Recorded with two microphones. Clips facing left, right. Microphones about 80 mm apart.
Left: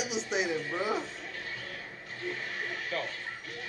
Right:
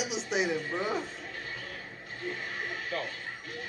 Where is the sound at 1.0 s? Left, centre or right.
Right.